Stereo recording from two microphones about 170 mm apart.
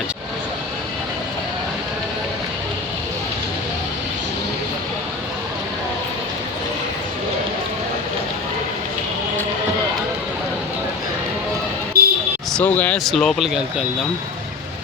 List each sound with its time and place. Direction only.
12.0 s vehicle: 65° right (ahead or behind)
12.5 s speech: 10° left (ahead or behind)